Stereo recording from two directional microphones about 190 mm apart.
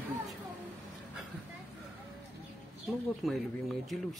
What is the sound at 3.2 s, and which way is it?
Speech, centre (ahead or behind).